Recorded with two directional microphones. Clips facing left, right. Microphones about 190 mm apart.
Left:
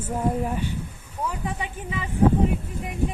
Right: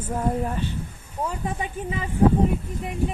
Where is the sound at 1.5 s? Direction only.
40° right (ahead or behind).